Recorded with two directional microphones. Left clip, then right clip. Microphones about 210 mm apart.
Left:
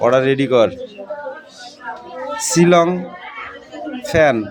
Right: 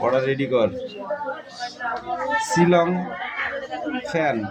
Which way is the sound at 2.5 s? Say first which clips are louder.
Left 7 dB; 45° left (ahead or behind).